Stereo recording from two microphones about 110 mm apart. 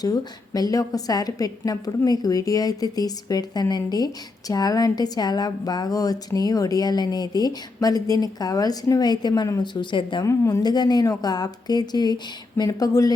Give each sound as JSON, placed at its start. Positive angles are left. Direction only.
{"t": 0.0, "sound": "a woman's voice", "side_deg": 35}
{"t": 10.2, "sound": "a woman's voice", "side_deg": 30}